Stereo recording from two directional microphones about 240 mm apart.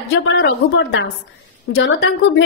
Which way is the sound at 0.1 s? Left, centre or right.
Left.